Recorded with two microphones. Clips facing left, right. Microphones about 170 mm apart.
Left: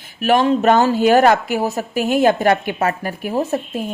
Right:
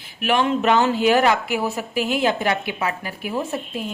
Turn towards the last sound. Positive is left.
turn(degrees=40)  # may be behind; listen again after turning